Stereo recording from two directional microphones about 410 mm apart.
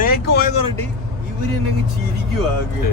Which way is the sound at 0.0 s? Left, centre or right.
Left.